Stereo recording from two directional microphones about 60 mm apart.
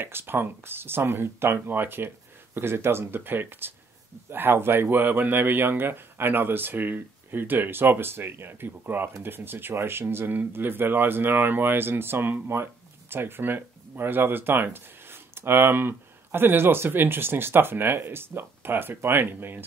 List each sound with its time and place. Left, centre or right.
0.0 s speech: right